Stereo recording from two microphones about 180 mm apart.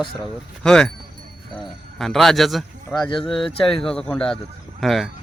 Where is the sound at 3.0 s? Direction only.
30° left (ahead or behind).